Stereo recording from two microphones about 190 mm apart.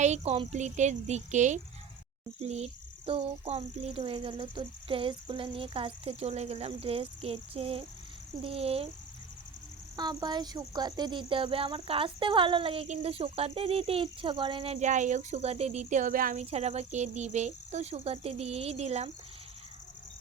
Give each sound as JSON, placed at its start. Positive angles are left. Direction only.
{"t": 0.0, "sound": "speech", "side_deg": -35}
{"t": 9.9, "sound": "speech", "side_deg": -20}